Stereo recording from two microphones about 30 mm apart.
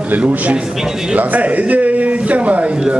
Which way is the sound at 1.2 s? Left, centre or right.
Right.